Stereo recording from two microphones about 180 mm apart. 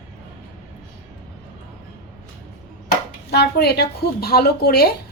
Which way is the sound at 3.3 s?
65° left (ahead or behind).